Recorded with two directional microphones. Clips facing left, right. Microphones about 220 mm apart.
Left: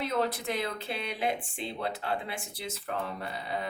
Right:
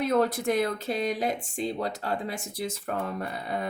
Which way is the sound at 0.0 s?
45° right (ahead or behind).